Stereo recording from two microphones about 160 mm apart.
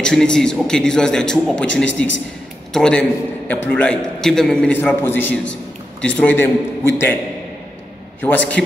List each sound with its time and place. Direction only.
0.0 s a man's voice: 5° left (ahead or behind)
8.2 s a man's voice: 10° left (ahead or behind)